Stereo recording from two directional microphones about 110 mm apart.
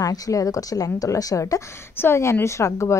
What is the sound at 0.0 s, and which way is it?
A woman's voice, 30° left (ahead or behind).